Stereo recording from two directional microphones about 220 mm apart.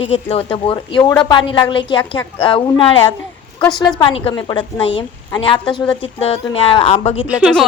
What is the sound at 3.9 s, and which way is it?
Speech, 20° left (ahead or behind).